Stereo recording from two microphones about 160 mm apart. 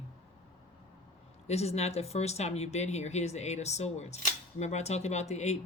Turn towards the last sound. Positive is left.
turn(degrees=45)  # may be behind; listen again after turning